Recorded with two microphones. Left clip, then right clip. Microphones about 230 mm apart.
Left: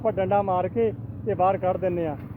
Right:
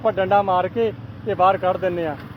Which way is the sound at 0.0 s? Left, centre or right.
Centre.